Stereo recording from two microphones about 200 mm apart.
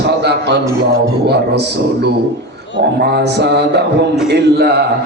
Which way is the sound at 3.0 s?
55° right (ahead or behind).